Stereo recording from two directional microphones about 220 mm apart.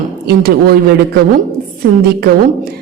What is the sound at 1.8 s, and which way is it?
Speech, 45° right (ahead or behind).